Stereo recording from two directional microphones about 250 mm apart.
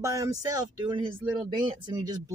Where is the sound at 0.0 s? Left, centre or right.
Centre.